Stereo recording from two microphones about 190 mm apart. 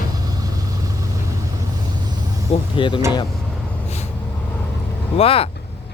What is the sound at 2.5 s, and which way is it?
Speech, 25° left (ahead or behind).